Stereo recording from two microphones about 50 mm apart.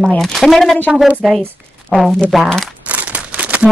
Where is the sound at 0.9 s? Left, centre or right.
Centre.